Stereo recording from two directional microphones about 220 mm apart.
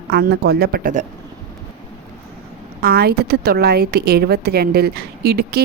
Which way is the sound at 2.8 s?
45° right (ahead or behind).